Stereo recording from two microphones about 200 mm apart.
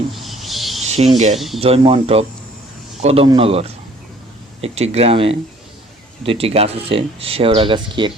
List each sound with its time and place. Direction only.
0.1 s a sound: centre (ahead or behind)
0.9 s speech: 30° right (ahead or behind)
1.4 s speech: centre (ahead or behind)
1.6 s speech: 30° right (ahead or behind)